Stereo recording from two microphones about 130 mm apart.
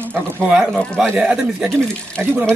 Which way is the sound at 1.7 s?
5° left (ahead or behind).